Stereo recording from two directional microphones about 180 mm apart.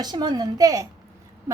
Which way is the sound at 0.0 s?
25° right (ahead or behind).